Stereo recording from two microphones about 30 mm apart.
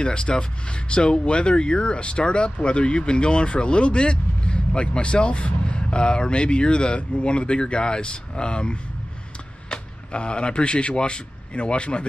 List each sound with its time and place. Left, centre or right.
0.0 s speech: left